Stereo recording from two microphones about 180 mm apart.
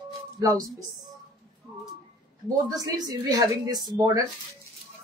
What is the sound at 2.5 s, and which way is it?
A woman's voice, 20° right (ahead or behind).